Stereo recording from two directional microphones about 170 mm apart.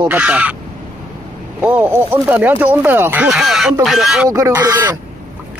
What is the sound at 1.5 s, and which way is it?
Speech, 10° right (ahead or behind).